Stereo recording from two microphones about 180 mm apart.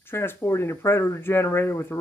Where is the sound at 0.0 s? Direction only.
10° left (ahead or behind).